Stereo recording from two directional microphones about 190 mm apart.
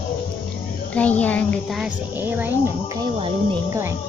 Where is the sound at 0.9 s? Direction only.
5° left (ahead or behind); by 2.5 s 10° right (ahead or behind).